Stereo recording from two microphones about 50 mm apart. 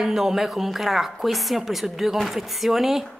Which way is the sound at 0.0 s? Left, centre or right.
Centre.